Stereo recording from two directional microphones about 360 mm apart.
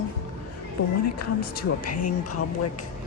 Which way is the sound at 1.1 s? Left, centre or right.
Left.